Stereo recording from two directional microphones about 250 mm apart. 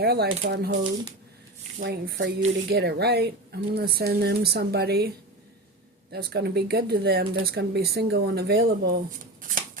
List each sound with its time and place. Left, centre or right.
0.0 s speech: right